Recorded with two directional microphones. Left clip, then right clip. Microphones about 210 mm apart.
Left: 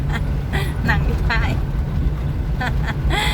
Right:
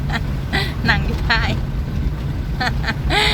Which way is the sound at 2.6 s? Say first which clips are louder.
Right 4 dB; 20° right (ahead or behind).